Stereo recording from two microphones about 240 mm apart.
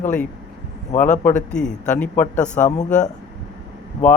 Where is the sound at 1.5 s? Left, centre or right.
Centre.